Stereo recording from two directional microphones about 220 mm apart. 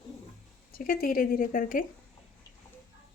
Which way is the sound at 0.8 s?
40° left (ahead or behind).